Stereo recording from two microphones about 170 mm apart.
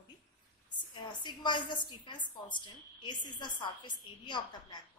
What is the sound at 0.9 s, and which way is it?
A woman's voice, 25° left (ahead or behind).